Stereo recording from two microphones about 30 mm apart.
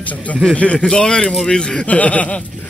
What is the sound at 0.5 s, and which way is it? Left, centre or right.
Speech, left.